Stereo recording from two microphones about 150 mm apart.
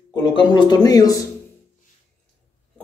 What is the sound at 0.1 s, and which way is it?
Speech, 30° left (ahead or behind).